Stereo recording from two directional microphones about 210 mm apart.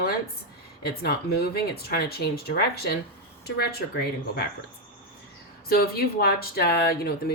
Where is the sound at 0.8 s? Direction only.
50° left (ahead or behind).